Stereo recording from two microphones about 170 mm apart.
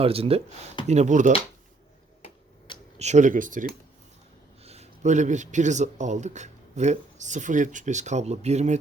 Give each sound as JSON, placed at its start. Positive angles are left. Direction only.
{"t": 0.0, "sound": "a man's voice", "side_deg": -35}
{"t": 3.0, "sound": "a man's voice", "side_deg": -45}
{"t": 4.6, "sound": "a man's voice", "side_deg": -40}